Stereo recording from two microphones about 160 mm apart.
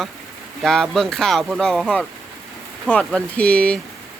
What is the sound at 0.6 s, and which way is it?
Speech, 5° left (ahead or behind).